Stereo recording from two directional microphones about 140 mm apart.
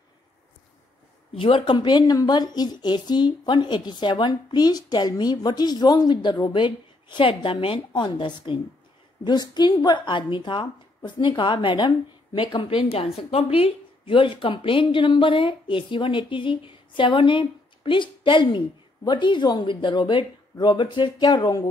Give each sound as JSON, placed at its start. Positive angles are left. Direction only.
{"t": 1.3, "sound": "a woman's voice", "side_deg": 40}